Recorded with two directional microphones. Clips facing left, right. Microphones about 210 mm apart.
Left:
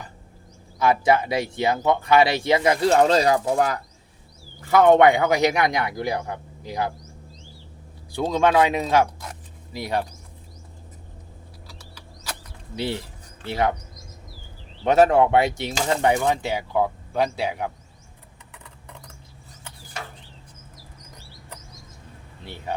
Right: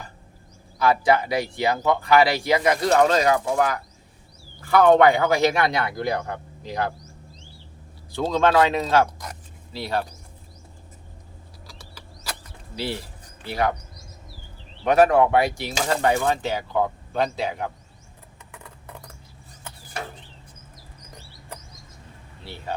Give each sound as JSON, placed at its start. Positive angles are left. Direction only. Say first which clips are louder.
{"t": 0.8, "sound": "speech", "louder": "even", "side_deg": 25}
{"t": 4.6, "sound": "speech", "louder": "left 1 dB", "side_deg": 20}
{"t": 8.1, "sound": "speech", "louder": "even", "side_deg": 10}
{"t": 12.7, "sound": "speech", "louder": "left 2 dB", "side_deg": 20}
{"t": 14.8, "sound": "speech", "louder": "even", "side_deg": 25}